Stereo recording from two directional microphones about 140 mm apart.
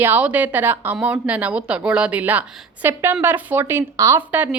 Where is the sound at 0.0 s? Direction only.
10° right (ahead or behind).